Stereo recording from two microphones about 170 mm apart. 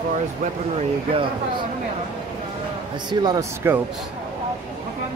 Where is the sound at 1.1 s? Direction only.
30° right (ahead or behind).